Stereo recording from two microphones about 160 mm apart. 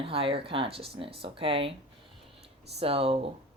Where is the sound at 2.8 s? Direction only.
35° right (ahead or behind).